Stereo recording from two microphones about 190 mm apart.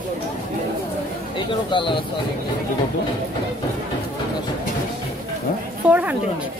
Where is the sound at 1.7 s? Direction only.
25° left (ahead or behind).